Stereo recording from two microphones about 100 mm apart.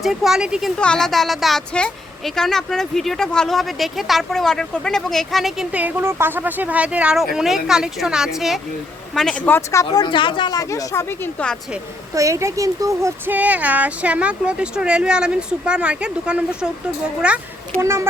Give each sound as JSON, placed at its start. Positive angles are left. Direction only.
{"t": 0.0, "sound": "speech", "side_deg": -5}
{"t": 0.8, "sound": "speech", "side_deg": 5}
{"t": 5.7, "sound": "speech", "side_deg": -20}
{"t": 9.5, "sound": "speech", "side_deg": 30}
{"t": 10.0, "sound": "speech", "side_deg": 55}
{"t": 10.5, "sound": "speech", "side_deg": 35}
{"t": 12.1, "sound": "speech", "side_deg": -30}
{"t": 13.3, "sound": "speech", "side_deg": -15}
{"t": 17.7, "sound": "speech", "side_deg": -25}